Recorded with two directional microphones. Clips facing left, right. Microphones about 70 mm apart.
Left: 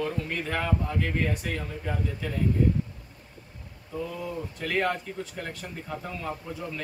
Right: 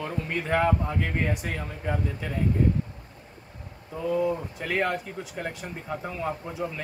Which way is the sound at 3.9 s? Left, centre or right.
Centre.